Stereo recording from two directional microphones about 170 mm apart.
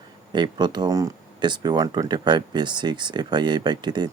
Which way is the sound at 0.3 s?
25° right (ahead or behind).